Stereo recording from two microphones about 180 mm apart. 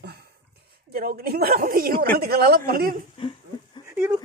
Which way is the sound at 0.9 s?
60° right (ahead or behind).